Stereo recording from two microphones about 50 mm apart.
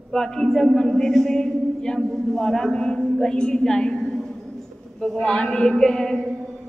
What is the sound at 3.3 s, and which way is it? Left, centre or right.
Speech, centre.